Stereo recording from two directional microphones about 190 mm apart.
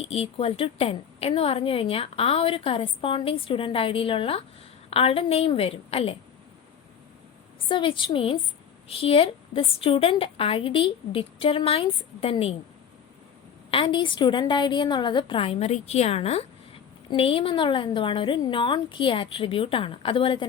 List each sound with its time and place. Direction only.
0.0 s a woman's voice: 30° left (ahead or behind)
7.7 s a woman's voice: 25° left (ahead or behind)
13.7 s a woman's voice: 25° left (ahead or behind)